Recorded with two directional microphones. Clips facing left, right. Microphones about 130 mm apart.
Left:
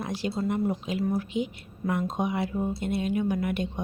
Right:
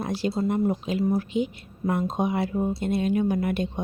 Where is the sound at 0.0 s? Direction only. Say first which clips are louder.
Right 4 dB; 35° right (ahead or behind).